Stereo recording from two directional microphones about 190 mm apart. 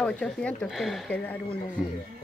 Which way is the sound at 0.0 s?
5° left (ahead or behind).